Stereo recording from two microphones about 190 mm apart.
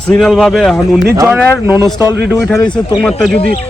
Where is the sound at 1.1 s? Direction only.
10° right (ahead or behind).